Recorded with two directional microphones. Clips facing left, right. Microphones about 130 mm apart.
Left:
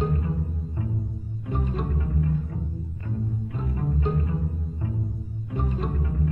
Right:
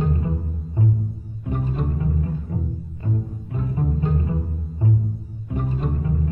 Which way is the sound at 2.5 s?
25° right (ahead or behind).